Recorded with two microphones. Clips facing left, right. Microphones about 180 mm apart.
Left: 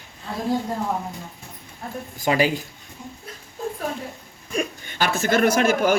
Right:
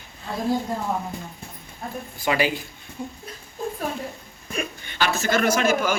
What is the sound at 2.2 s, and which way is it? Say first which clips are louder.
Speech: left 3 dB; 40° left (ahead or behind).